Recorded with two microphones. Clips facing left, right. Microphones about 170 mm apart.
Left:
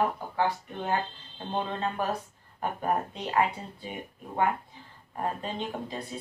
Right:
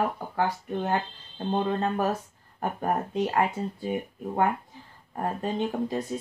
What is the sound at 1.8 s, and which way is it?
Speech, 45° right (ahead or behind).